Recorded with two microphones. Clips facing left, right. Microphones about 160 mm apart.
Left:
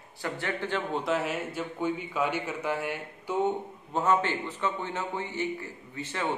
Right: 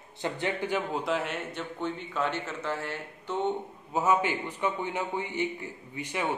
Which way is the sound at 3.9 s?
10° right (ahead or behind).